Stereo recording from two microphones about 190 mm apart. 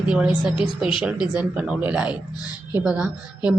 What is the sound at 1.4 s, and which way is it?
Speech, 5° right (ahead or behind).